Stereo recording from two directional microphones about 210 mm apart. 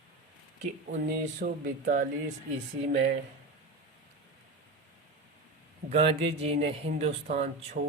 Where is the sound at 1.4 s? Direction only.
40° right (ahead or behind).